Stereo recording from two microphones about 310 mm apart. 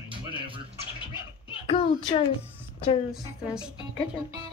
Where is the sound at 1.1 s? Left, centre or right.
Centre.